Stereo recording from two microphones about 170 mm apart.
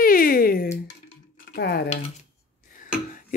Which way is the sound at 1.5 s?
70° left (ahead or behind).